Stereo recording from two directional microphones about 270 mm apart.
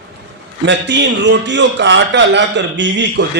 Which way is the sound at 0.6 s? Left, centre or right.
Right.